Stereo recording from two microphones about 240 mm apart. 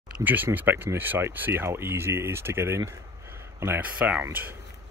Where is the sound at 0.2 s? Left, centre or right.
Centre.